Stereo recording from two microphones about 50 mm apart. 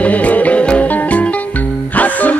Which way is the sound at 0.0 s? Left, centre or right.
Left.